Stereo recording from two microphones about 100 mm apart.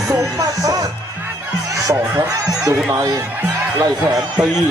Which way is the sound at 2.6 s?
35° right (ahead or behind).